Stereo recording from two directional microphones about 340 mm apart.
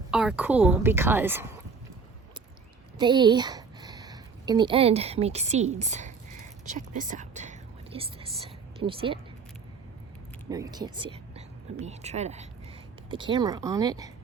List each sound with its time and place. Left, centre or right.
0.1 s a woman's voice: centre
3.0 s speech: centre
10.5 s speech: centre